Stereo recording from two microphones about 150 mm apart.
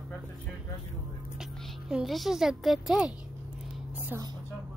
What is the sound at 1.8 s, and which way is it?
A woman's voice, centre (ahead or behind).